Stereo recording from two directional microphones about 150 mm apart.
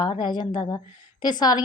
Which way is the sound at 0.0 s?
30° left (ahead or behind).